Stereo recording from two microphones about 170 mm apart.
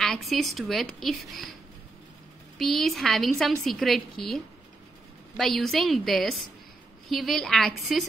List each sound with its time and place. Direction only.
0.0 s a woman's voice: centre (ahead or behind)
2.6 s a woman's voice: centre (ahead or behind)
5.4 s a woman's voice: centre (ahead or behind)